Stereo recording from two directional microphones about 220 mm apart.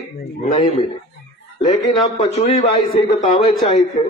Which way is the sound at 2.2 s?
30° left (ahead or behind).